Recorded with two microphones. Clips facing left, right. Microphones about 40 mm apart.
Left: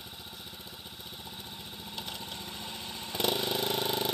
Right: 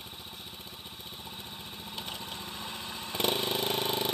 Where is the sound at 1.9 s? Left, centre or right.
Right.